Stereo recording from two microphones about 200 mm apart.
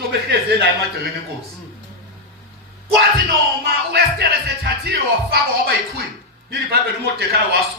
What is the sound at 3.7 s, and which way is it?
Speech, 50° right (ahead or behind).